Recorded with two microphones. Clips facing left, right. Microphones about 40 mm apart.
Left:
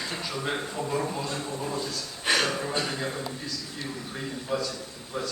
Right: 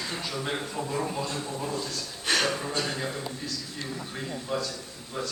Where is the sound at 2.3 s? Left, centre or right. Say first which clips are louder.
Even; centre.